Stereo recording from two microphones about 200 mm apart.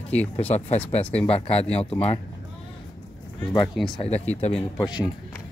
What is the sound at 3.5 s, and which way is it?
Speech, centre (ahead or behind).